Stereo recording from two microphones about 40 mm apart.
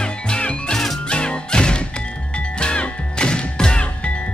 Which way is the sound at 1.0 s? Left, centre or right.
Left.